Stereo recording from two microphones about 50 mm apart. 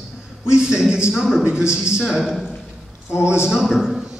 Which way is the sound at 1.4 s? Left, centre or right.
Centre.